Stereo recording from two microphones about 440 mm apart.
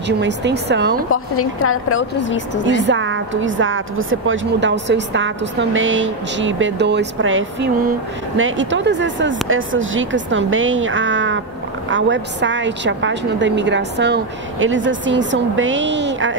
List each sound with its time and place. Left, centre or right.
0.2 s a woman's voice: right
1.1 s a woman's voice: left
2.8 s a woman's voice: right